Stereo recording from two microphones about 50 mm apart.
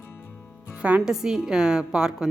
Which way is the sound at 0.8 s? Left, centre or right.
Right.